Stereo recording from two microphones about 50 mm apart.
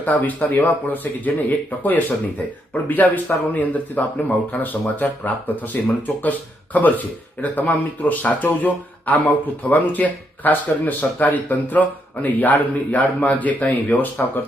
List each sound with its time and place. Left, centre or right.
0.0 s speech: left